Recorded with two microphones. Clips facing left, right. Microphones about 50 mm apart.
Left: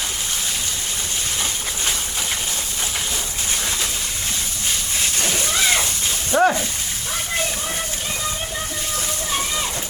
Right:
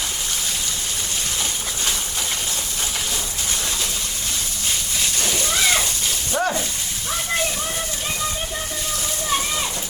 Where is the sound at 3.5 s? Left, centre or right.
Centre.